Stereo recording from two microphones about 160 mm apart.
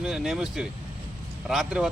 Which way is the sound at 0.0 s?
Centre (ahead or behind).